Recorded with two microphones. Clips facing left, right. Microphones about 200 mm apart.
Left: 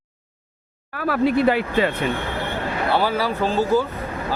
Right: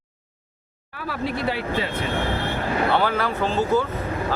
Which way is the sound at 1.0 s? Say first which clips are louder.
Left 8 dB; 55° left (ahead or behind).